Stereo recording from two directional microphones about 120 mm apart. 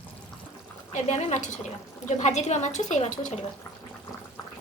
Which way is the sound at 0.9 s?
80° left.